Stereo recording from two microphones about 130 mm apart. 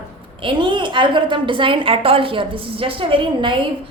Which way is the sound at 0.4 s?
35° right (ahead or behind).